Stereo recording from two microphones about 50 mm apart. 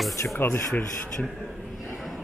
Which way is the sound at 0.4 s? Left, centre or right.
Left.